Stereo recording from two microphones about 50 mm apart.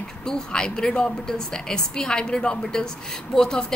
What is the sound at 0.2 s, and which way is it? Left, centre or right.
A woman's voice, centre.